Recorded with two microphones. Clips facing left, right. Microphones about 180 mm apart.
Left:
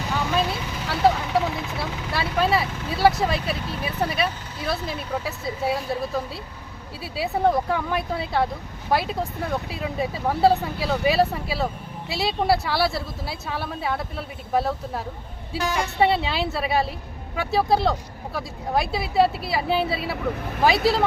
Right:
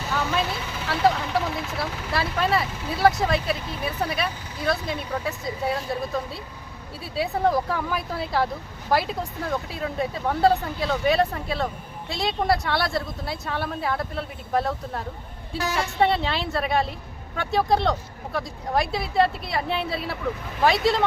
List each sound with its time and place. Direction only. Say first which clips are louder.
0.9 s speech: left 1 dB; centre (ahead or behind)